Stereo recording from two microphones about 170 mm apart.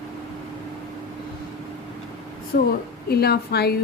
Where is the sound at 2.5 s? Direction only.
65° left (ahead or behind).